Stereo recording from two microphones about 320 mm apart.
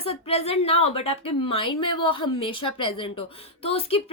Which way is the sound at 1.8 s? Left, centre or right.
Left.